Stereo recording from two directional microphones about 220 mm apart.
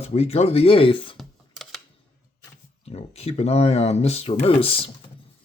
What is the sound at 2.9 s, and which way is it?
Speech, 30° left (ahead or behind).